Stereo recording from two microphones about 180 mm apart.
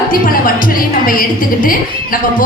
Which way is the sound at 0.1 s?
50° left (ahead or behind).